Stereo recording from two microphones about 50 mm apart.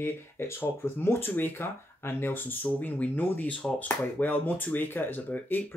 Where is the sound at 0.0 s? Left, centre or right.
Left.